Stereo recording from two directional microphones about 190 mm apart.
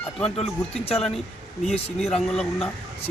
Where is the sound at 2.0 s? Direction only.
Centre (ahead or behind).